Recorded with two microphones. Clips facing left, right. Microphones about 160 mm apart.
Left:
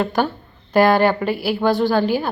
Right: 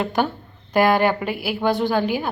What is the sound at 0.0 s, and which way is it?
A woman's voice, 20° right (ahead or behind).